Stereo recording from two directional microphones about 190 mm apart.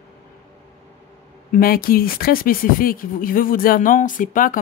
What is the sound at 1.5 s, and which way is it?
Speech, 50° left (ahead or behind).